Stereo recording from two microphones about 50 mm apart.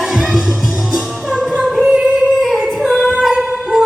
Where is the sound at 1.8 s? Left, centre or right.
Right.